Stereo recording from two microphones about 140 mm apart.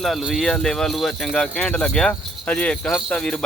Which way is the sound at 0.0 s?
Centre (ahead or behind).